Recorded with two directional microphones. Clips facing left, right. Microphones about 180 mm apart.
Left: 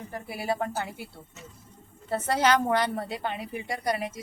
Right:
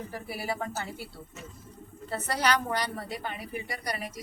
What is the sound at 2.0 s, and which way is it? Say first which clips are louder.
A woman's voice: left 4 dB; 25° left (ahead or behind).